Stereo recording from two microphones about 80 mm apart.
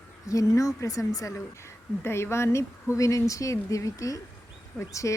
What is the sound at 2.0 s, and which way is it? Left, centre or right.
Speech, left.